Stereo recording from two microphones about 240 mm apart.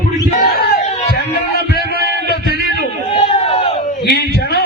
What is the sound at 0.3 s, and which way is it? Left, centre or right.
Battle cry, left.